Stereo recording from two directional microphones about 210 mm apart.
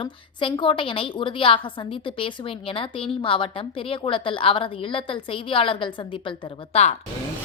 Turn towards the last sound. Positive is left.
turn(degrees=25)  # may be behind; listen again after turning